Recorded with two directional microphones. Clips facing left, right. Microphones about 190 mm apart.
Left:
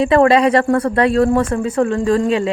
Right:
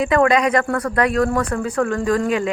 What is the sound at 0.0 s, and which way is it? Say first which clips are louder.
Speech: left 4 dB; 30° left (ahead or behind).